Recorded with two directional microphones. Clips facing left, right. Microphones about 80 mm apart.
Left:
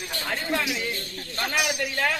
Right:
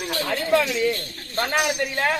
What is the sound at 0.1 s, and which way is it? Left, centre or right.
Speech, right.